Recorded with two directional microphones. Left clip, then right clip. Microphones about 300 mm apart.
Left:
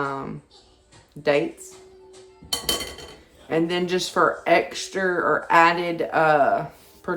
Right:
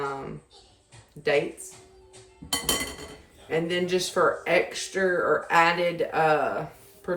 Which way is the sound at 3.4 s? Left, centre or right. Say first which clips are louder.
Left 3 dB; centre.